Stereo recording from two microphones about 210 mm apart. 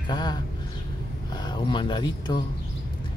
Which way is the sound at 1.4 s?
20° left (ahead or behind).